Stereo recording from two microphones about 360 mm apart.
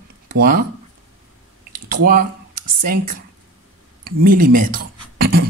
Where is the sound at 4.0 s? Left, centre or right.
Right.